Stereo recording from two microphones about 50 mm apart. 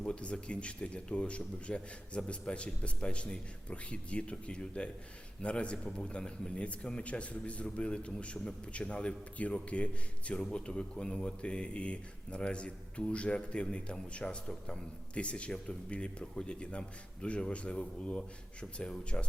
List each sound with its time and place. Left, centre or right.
0.0 s a man's voice: left